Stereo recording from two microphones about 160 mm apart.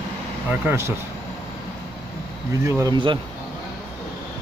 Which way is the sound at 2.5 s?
15° right (ahead or behind).